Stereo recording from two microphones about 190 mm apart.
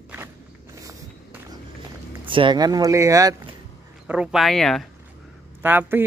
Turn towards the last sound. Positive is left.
turn(degrees=-10)  # may be behind; listen again after turning